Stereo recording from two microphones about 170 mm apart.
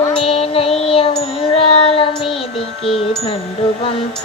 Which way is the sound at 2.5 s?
Centre (ahead or behind).